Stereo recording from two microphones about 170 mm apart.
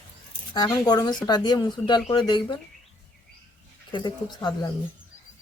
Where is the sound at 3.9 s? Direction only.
25° left (ahead or behind).